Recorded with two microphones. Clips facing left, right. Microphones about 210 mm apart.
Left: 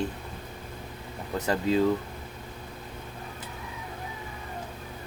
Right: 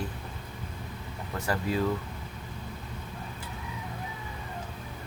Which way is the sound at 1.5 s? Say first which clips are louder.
Left 5 dB; 25° left (ahead or behind).